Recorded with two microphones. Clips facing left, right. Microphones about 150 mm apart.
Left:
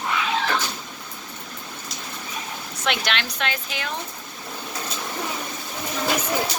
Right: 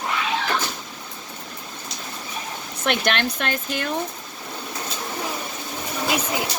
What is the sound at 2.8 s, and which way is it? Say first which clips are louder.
Speech: right 4 dB; 50° right (ahead or behind).